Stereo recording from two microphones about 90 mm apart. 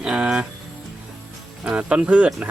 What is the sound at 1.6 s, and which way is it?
Speech, 10° right (ahead or behind).